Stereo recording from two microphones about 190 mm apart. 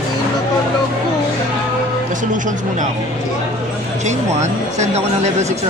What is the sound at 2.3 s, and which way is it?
Speech, 40° right (ahead or behind).